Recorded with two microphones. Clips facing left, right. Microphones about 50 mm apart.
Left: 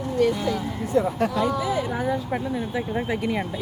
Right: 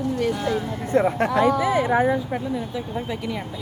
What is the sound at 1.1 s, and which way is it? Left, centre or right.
Speech, right.